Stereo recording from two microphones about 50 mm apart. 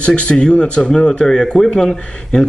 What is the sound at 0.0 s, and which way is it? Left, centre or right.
Speech, left.